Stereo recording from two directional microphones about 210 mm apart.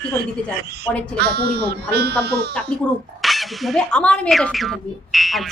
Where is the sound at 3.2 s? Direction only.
Centre (ahead or behind).